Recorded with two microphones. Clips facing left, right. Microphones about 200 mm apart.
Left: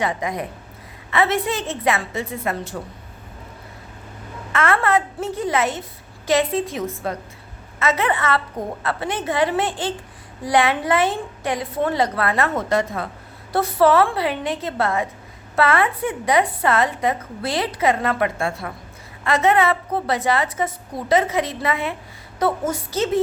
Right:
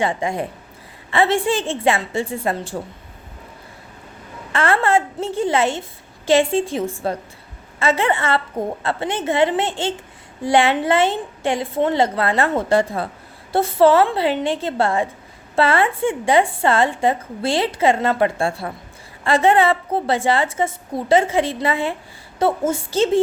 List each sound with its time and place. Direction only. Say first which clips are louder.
0.0 s a woman's voice: right 3 dB; 30° right (ahead or behind)
4.5 s a woman's voice: right 2 dB; 30° right (ahead or behind)